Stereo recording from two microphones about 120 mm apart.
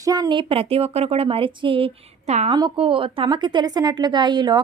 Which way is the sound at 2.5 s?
45° right (ahead or behind).